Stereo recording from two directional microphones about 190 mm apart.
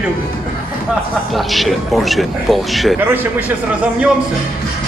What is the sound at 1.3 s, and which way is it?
Speech, centre (ahead or behind).